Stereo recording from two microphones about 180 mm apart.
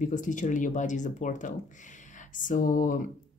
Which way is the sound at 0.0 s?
45° left (ahead or behind).